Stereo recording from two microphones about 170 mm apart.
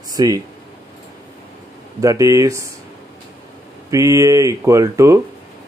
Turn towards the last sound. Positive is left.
turn(degrees=-20)  # may be behind; listen again after turning